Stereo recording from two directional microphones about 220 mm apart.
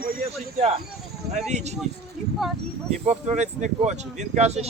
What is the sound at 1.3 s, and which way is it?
Speech, 30° right (ahead or behind).